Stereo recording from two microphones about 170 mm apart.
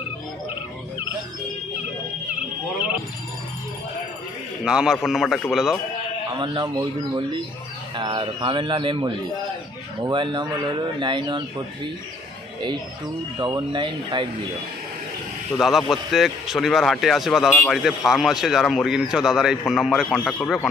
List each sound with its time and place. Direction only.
4.6 s a man's voice: 5° right (ahead or behind)
6.4 s speech: 25° right (ahead or behind)
13.4 s speech: 25° right (ahead or behind)
15.5 s a man's voice: centre (ahead or behind)